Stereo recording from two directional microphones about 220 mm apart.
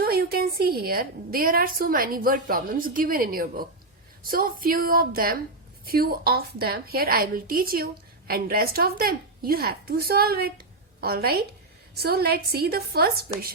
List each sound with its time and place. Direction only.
0.0 s a woman's voice: 45° right (ahead or behind)